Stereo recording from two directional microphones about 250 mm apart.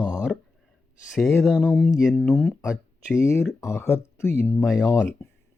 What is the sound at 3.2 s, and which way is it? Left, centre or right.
Speech, centre.